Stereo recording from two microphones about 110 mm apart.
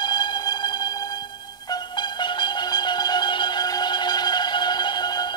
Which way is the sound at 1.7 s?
45° left (ahead or behind).